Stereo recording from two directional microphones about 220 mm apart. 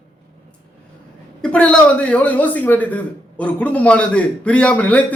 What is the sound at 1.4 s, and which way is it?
A man's voice, 5° left (ahead or behind).